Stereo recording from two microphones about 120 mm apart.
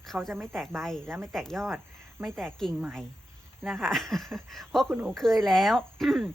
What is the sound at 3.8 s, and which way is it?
Speech, 5° left (ahead or behind).